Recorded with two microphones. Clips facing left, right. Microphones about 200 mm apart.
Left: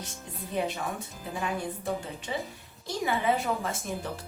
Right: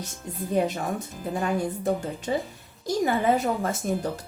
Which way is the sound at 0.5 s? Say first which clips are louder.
Right 6 dB; 45° right (ahead or behind).